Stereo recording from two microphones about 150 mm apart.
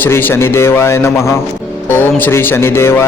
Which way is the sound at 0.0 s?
15° left (ahead or behind).